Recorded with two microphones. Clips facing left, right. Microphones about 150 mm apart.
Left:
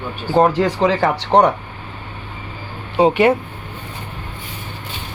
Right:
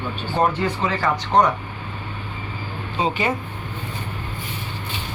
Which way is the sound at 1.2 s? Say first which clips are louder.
Left 4 dB; 65° left (ahead or behind).